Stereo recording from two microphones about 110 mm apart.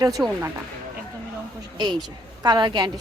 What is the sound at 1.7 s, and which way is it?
A woman's voice, 40° right (ahead or behind).